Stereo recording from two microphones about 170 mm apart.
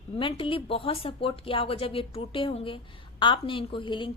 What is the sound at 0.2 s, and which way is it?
A woman's voice, 30° left (ahead or behind).